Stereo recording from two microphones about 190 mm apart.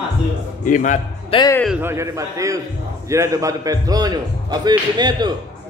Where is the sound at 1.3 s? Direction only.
20° left (ahead or behind).